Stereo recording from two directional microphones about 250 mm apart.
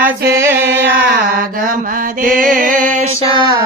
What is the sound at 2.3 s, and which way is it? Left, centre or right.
Music, right.